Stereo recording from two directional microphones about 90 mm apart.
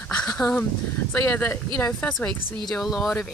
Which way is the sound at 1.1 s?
25° left (ahead or behind).